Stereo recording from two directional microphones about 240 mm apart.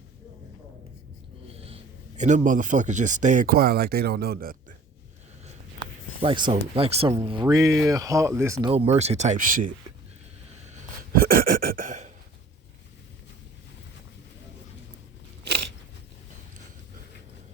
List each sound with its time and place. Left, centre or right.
1.5 s speech: right
6.2 s speech: centre
8.7 s speech: right
10.7 s a sound: right